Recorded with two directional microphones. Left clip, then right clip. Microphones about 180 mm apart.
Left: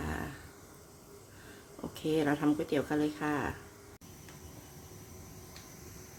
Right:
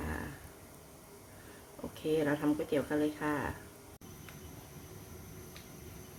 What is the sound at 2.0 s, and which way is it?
Speech, 25° left (ahead or behind).